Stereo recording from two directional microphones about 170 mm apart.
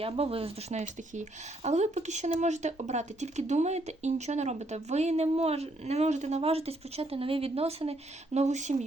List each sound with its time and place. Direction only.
0.0 s speech: 35° right (ahead or behind)